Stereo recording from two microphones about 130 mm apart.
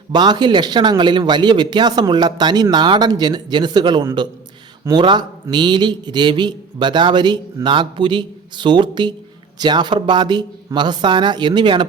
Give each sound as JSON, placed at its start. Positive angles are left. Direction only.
{"t": 0.1, "sound": "a man's voice", "side_deg": -35}